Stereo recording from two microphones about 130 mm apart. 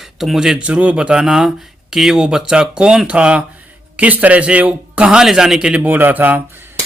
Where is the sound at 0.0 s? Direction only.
Centre (ahead or behind).